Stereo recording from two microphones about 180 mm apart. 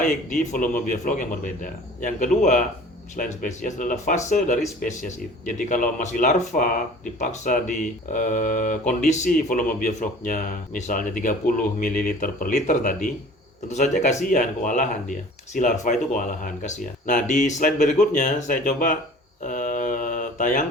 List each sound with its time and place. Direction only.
0.0 s speech: 45° left (ahead or behind)
19.4 s mantra: 45° left (ahead or behind)